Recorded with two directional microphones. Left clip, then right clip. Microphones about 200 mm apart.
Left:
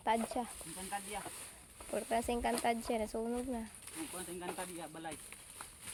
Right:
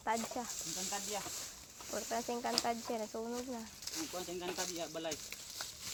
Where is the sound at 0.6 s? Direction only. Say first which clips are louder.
Right 2 dB; 10° right (ahead or behind).